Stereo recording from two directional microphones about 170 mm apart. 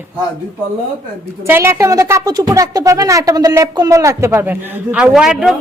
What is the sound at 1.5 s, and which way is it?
A woman's voice, 15° right (ahead or behind).